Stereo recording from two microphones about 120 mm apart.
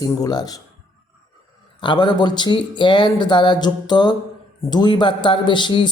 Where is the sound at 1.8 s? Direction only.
40° left (ahead or behind).